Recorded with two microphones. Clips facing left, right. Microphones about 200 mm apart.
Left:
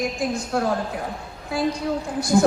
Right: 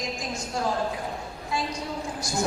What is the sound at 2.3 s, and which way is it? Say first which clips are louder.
Speech: left 12 dB; 75° left (ahead or behind).